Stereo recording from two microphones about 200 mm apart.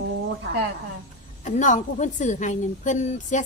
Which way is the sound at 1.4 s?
40° left (ahead or behind).